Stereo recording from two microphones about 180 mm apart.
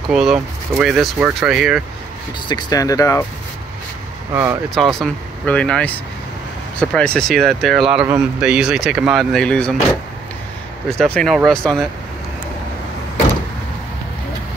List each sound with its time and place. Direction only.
0.1 s speech: 5° right (ahead or behind)
2.4 s speech: 20° left (ahead or behind)
4.3 s speech: 15° right (ahead or behind)
4.6 s speech: centre (ahead or behind)
11.0 s speech: 5° left (ahead or behind)